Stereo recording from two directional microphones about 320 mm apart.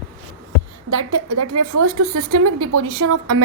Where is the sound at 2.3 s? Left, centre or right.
Right.